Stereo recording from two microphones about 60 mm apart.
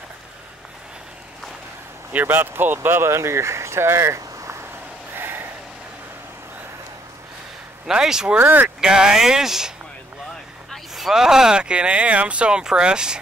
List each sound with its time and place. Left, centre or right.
2.1 s speech: right
5.1 s snort: right
7.8 s speech: centre
8.4 s speech: right
8.6 s speech: centre
10.7 s speech: centre